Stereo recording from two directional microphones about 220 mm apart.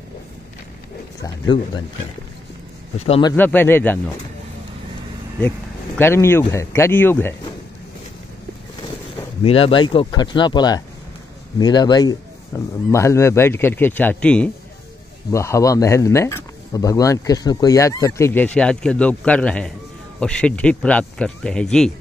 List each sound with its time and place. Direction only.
3.0 s speech: 25° left (ahead or behind)
3.3 s speech: 10° left (ahead or behind)
5.9 s speech: 10° left (ahead or behind)
9.4 s speech: 25° left (ahead or behind); by 21.9 s 5° left (ahead or behind)